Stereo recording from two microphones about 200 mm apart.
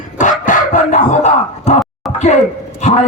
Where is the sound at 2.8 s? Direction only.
35° left (ahead or behind).